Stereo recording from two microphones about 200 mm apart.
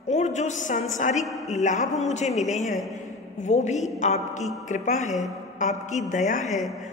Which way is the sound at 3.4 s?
35° left (ahead or behind).